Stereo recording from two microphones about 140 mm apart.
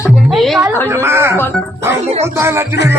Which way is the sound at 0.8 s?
20° right (ahead or behind).